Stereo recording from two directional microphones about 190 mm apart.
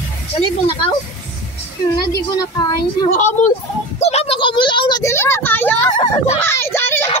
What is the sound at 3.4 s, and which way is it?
Speech, 40° left (ahead or behind).